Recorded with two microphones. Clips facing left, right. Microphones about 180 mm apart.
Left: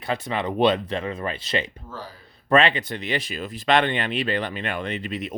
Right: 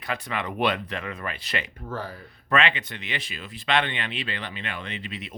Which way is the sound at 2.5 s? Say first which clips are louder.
Left 5 dB; 35° left (ahead or behind).